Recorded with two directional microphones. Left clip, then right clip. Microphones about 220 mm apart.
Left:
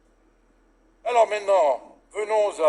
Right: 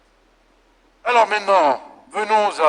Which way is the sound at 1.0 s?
30° right (ahead or behind).